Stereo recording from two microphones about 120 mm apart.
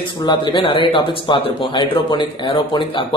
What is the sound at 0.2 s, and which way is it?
Speech, 40° left (ahead or behind).